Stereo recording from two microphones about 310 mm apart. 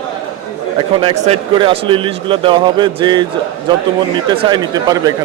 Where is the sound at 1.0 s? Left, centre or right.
Centre.